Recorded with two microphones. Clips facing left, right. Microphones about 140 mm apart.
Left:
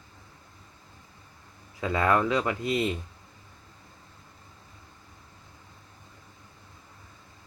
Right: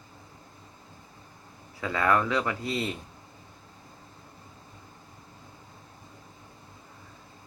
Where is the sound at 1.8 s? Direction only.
20° left (ahead or behind).